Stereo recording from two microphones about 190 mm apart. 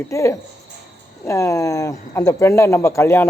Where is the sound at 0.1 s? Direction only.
15° left (ahead or behind).